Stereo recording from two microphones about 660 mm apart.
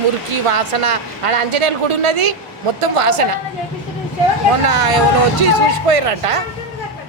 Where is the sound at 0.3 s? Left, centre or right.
Right.